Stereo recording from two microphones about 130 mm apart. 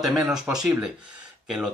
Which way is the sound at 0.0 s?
Centre (ahead or behind).